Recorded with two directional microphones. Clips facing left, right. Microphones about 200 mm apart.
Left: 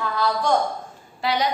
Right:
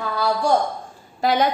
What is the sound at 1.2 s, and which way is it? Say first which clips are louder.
Speech: right 4 dB; 50° right (ahead or behind).